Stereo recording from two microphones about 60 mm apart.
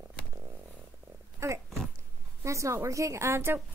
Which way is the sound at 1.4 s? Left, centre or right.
Right.